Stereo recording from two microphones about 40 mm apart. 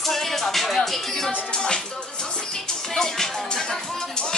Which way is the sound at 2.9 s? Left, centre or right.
Centre.